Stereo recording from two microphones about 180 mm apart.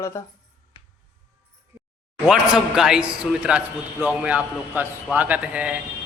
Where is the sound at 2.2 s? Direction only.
5° right (ahead or behind).